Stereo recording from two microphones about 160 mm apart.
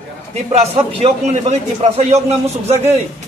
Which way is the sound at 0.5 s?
40° right (ahead or behind).